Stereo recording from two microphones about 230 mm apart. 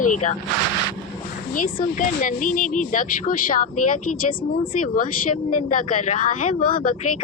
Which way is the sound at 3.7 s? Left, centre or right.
Left.